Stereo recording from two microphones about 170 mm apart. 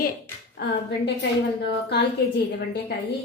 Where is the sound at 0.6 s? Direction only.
90° left.